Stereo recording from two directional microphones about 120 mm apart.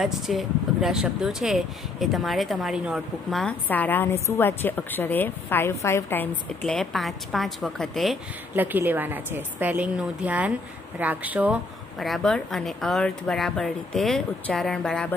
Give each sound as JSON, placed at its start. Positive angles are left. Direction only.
{"t": 0.0, "sound": "speech", "side_deg": 0}
{"t": 3.6, "sound": "a woman's voice", "side_deg": 15}
{"t": 6.6, "sound": "speech", "side_deg": 0}
{"t": 8.5, "sound": "a woman's voice", "side_deg": -15}